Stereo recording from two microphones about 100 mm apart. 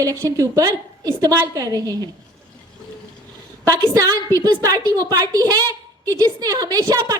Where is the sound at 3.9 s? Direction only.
35° right (ahead or behind).